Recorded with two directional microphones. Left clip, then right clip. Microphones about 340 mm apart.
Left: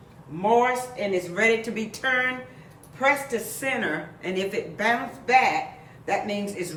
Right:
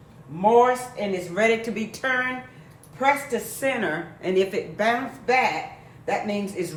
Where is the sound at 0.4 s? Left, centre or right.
Centre.